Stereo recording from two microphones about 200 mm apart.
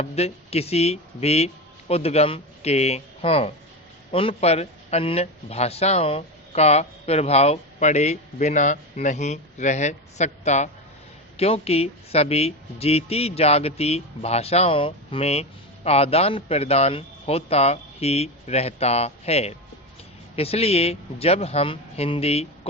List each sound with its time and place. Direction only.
0.0 s speech: 30° left (ahead or behind)